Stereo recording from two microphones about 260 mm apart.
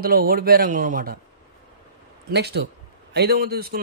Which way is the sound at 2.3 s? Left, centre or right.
Right.